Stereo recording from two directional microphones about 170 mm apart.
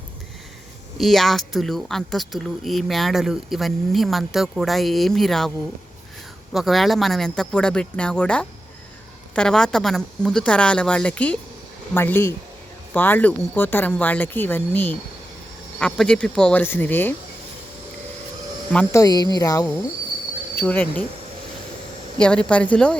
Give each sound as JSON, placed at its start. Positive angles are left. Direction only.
{"t": 0.9, "sound": "speech", "side_deg": 0}
{"t": 6.5, "sound": "speech", "side_deg": 0}
{"t": 18.7, "sound": "speech", "side_deg": 5}
{"t": 18.9, "sound": "speech", "side_deg": 25}
{"t": 20.6, "sound": "speech", "side_deg": 10}
{"t": 22.2, "sound": "speech", "side_deg": 5}